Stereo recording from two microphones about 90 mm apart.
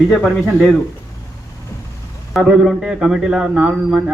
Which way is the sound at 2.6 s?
5° right (ahead or behind).